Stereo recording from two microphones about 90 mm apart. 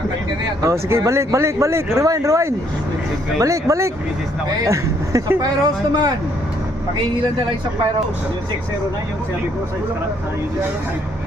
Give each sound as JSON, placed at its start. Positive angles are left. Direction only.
{"t": 0.6, "sound": "speech", "side_deg": -35}